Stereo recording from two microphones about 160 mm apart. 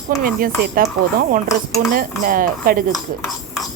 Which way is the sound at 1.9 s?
60° right (ahead or behind).